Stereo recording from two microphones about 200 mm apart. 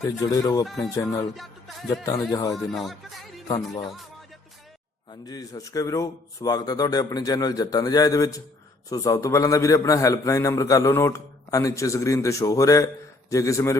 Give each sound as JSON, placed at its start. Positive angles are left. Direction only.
{"t": 0.0, "sound": "a man's voice", "side_deg": 15}
{"t": 1.4, "sound": "music", "side_deg": 0}
{"t": 2.3, "sound": "a man's voice", "side_deg": 20}
{"t": 2.7, "sound": "speech", "side_deg": 0}
{"t": 5.2, "sound": "a man's voice", "side_deg": 20}